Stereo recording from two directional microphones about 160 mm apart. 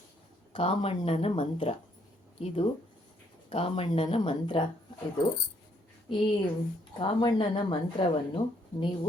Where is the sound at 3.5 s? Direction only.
35° left (ahead or behind).